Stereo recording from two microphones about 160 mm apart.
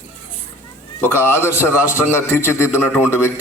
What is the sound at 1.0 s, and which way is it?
A man's voice, 15° left (ahead or behind).